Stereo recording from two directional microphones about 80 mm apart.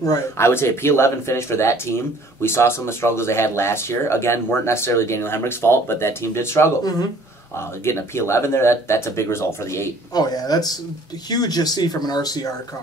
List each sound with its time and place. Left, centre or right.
0.4 s speech: left
6.8 s speech: left
7.5 s speech: left
10.1 s speech: left